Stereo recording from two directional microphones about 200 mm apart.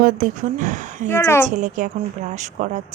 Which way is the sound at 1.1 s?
10° left (ahead or behind).